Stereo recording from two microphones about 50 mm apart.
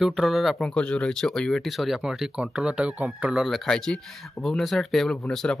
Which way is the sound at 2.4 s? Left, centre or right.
Right.